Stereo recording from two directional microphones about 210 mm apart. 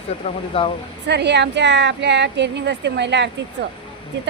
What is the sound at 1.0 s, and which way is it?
Speech, 55° right (ahead or behind).